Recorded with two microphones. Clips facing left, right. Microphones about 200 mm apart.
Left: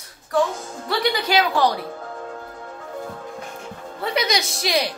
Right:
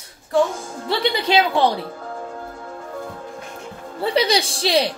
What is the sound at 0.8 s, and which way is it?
Speech, 25° right (ahead or behind).